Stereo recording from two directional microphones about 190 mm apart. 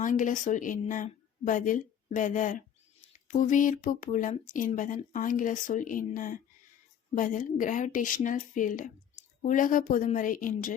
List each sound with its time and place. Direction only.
0.0 s speech: 45° left (ahead or behind)